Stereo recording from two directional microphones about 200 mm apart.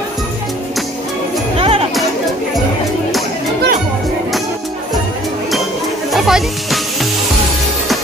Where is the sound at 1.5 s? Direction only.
30° right (ahead or behind).